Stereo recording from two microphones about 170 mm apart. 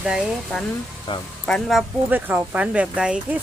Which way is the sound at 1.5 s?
Centre (ahead or behind).